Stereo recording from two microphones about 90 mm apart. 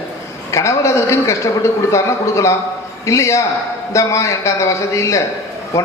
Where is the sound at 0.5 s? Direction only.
35° left (ahead or behind).